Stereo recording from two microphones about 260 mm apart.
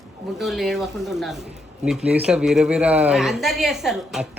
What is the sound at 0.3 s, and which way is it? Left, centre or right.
A woman's voice, centre.